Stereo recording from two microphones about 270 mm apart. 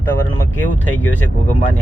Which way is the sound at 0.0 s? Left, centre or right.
Centre.